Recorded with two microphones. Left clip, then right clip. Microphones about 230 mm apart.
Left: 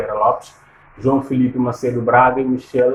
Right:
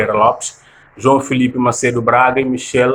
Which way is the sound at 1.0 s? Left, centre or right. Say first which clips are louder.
Right 5 dB; right.